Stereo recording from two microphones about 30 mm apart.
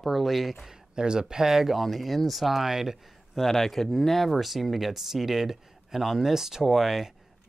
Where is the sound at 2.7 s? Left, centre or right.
Centre.